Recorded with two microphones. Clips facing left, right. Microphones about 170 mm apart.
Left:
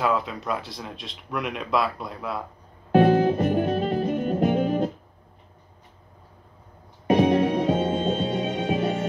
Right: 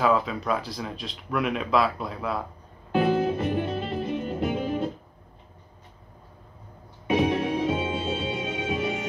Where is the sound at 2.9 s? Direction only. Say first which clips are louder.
Left 5 dB; 45° left (ahead or behind).